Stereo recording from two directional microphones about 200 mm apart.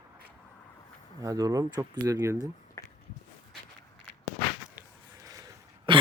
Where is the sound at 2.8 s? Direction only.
15° left (ahead or behind).